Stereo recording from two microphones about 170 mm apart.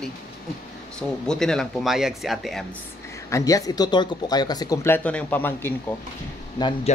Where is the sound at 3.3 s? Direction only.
20° left (ahead or behind).